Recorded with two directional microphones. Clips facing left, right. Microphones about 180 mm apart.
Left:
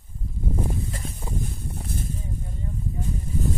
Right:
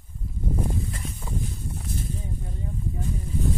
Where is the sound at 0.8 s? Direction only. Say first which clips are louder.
Left 1 dB; 30° left (ahead or behind).